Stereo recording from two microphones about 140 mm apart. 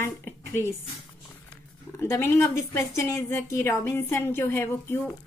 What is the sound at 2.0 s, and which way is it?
A woman's voice, 20° left (ahead or behind).